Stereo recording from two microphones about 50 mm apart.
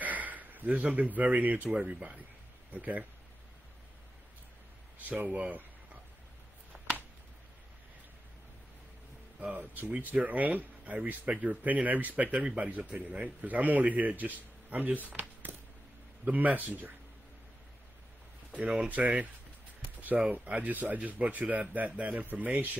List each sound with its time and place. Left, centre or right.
0.0 s speech: right
5.1 s speech: right
9.4 s speech: right
18.9 s speech: right